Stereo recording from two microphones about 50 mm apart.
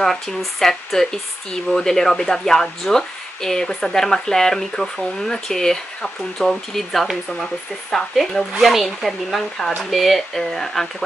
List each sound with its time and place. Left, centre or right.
0.0 s speech: centre